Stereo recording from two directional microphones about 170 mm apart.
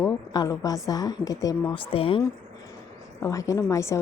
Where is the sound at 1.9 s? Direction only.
35° left (ahead or behind).